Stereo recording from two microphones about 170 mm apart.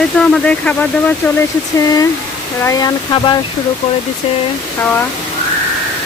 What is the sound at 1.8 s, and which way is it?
Speech, 20° left (ahead or behind).